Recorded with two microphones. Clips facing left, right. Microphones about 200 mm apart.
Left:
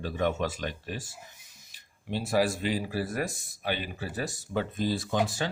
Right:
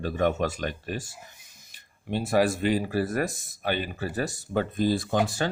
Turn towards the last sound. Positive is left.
turn(degrees=-50)  # may be behind; listen again after turning